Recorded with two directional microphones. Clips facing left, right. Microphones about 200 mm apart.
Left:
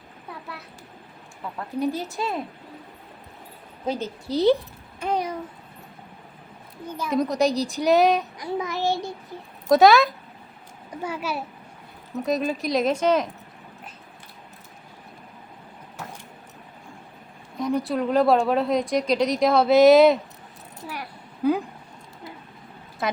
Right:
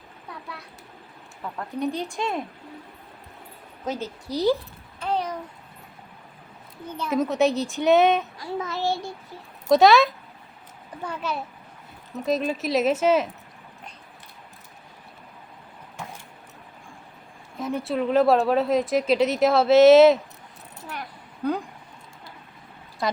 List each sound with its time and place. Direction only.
0.3 s a sound: centre (ahead or behind)
1.8 s speech: 5° left (ahead or behind)
3.8 s a woman's voice: 20° left (ahead or behind)
4.9 s a sound: 10° left (ahead or behind)
6.8 s child singing: 10° left (ahead or behind)
7.1 s speech: 5° right (ahead or behind)
8.4 s child singing: 15° left (ahead or behind)
9.6 s speech: centre (ahead or behind)
11.0 s child singing: 10° left (ahead or behind)
12.2 s speech: centre (ahead or behind)
16.0 s vehicle: 5° left (ahead or behind)
17.6 s speech: 5° right (ahead or behind)
20.8 s a sound: 10° left (ahead or behind)